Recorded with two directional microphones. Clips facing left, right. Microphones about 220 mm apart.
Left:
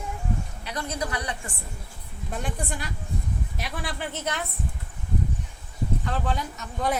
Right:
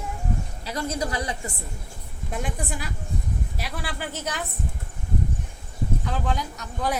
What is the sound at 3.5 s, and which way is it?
Speech, centre (ahead or behind).